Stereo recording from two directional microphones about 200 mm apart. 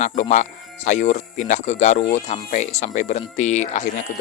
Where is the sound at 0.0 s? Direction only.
35° left (ahead or behind).